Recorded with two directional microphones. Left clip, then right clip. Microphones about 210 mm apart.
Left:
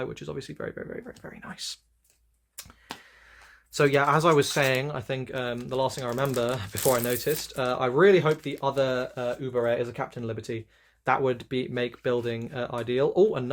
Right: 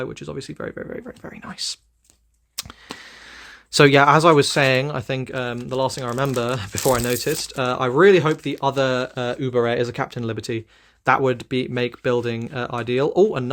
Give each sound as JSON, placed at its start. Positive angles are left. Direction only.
{"t": 0.0, "sound": "speech", "side_deg": -25}
{"t": 2.6, "sound": "a sound", "side_deg": -45}
{"t": 3.0, "sound": "speech", "side_deg": -55}